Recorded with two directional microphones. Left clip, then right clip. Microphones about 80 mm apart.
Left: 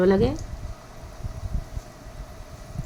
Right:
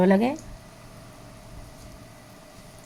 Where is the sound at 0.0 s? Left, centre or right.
Right.